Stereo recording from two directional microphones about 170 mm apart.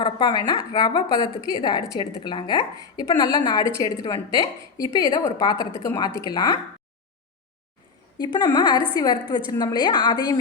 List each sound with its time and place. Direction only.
0.0 s a woman's voice: 25° left (ahead or behind)
8.2 s a woman's voice: 25° left (ahead or behind)